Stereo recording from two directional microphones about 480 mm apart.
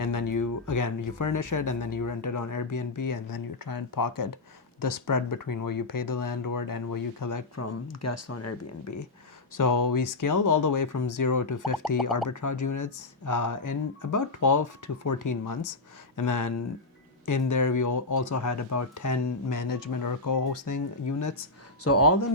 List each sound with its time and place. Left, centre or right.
0.0 s speech: left
9.6 s speech: left